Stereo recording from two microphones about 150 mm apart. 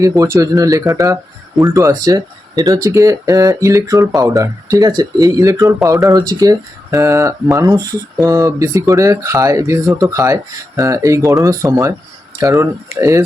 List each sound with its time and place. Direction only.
0.0 s speech: 20° right (ahead or behind)